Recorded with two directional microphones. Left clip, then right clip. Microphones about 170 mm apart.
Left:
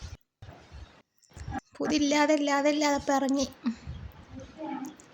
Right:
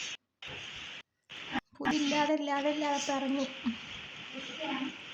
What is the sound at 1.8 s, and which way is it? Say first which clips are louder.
A woman's voice: left 5 dB; 40° left (ahead or behind).